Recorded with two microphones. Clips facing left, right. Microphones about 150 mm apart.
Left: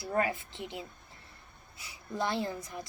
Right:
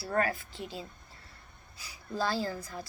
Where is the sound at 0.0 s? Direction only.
20° left (ahead or behind).